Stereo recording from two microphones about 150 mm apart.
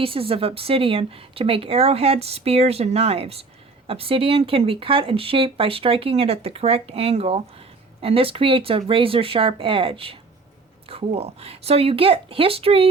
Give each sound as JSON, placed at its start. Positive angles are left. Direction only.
{"t": 0.0, "sound": "speech", "side_deg": -40}